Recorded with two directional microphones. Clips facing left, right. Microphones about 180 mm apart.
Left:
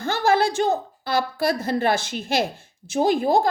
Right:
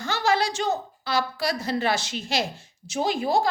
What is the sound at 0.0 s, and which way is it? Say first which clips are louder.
A woman's voice: left 4 dB; 55° left (ahead or behind).